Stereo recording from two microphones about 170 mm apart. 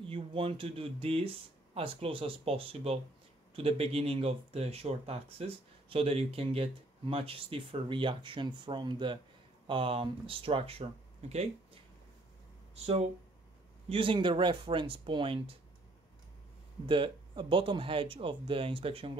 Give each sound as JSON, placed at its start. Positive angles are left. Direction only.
{"t": 0.1, "sound": "speech", "side_deg": -30}
{"t": 12.7, "sound": "speech", "side_deg": -35}
{"t": 16.8, "sound": "speech", "side_deg": -30}